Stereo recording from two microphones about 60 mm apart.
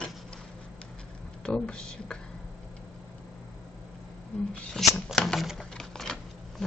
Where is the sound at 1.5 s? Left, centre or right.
Centre.